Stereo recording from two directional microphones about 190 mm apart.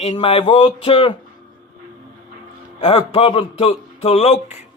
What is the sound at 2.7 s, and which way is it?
A man's voice, 30° left (ahead or behind).